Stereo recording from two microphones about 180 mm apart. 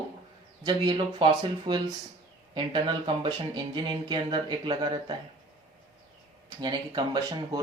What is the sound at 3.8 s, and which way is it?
Speech, 25° right (ahead or behind).